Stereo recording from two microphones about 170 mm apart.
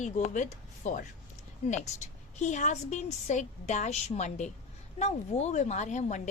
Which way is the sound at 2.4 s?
45° left (ahead or behind).